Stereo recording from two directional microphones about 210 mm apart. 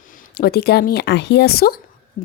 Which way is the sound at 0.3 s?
50° left (ahead or behind).